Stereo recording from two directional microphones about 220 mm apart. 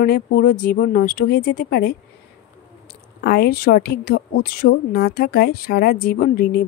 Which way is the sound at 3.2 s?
45° left (ahead or behind).